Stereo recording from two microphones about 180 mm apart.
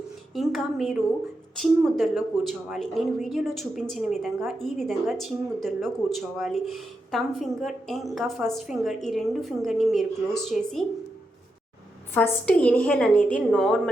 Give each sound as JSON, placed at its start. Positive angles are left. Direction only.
{"t": 0.3, "sound": "a woman's voice", "side_deg": 0}
{"t": 12.1, "sound": "a woman's voice", "side_deg": 10}